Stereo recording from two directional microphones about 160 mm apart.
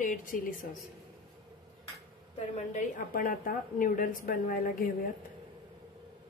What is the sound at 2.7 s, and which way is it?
A woman's voice, 55° left (ahead or behind).